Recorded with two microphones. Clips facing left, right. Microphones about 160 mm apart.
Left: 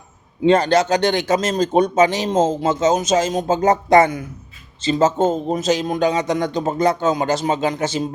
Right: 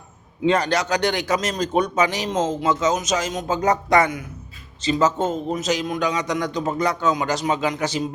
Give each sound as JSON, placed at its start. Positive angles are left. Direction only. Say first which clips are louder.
{"t": 0.4, "sound": "speech", "louder": "left 5 dB", "side_deg": 25}